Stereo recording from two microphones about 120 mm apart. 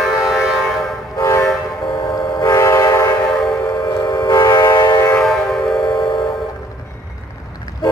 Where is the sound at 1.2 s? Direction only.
25° left (ahead or behind).